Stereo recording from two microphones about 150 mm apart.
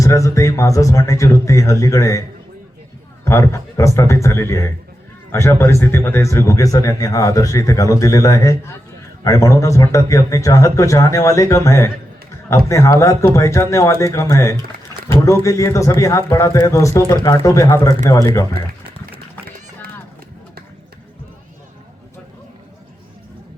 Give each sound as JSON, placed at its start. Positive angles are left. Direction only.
{"t": 0.0, "sound": "speech", "side_deg": 20}
{"t": 3.2, "sound": "speech", "side_deg": 20}